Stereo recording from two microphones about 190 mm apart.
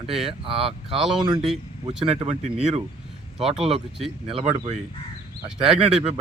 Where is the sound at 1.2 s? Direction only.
25° right (ahead or behind).